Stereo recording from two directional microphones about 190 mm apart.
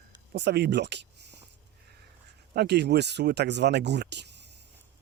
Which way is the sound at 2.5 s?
60° right (ahead or behind).